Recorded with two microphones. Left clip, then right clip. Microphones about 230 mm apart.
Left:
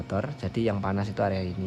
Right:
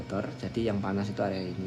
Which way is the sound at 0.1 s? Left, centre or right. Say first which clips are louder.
Left 3 dB; left.